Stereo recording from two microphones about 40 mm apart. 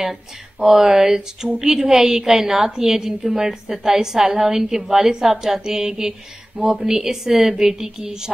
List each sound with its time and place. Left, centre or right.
0.0 s speech: centre